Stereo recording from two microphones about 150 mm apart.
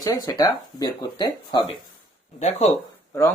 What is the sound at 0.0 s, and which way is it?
Speech, 25° left (ahead or behind).